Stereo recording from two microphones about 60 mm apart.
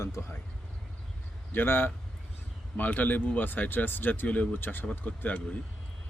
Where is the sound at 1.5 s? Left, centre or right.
Left.